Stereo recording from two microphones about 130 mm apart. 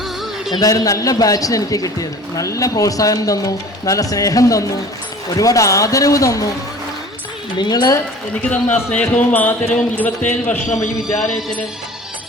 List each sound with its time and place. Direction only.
0.5 s a man's voice: 30° left (ahead or behind)
7.6 s speech: 30° left (ahead or behind)
8.4 s a man's voice: 10° left (ahead or behind)
11.2 s speech: centre (ahead or behind)